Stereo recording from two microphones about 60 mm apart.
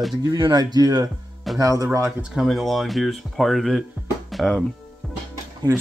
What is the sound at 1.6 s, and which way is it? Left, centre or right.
Speech, right.